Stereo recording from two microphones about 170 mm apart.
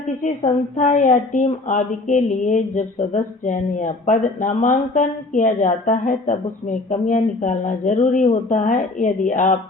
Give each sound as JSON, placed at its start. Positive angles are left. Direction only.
{"t": 0.2, "sound": "speech", "side_deg": 50}